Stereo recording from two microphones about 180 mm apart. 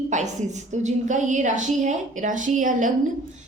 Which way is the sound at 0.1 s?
40° right (ahead or behind).